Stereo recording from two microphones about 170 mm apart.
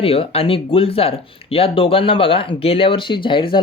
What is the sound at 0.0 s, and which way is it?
Speech, 35° left (ahead or behind).